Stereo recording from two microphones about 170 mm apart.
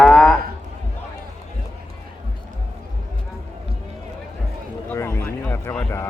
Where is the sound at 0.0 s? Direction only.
5° left (ahead or behind).